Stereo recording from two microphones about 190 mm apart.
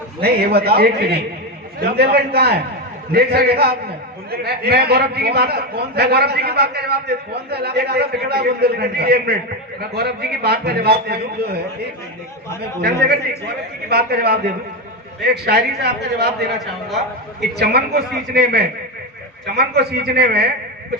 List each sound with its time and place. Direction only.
0.2 s a man's voice: 55° right (ahead or behind)
12.8 s a man's voice: 55° right (ahead or behind)
17.6 s a man's voice: 55° right (ahead or behind)